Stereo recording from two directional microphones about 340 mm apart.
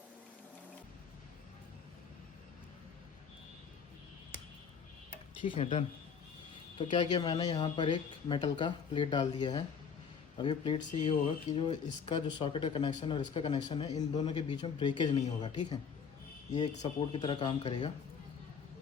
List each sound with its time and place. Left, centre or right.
5.3 s speech: centre
6.9 s speech: centre